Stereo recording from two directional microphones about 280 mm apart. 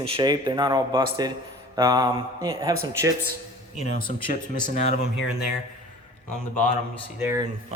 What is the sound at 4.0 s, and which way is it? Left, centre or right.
Speech, left.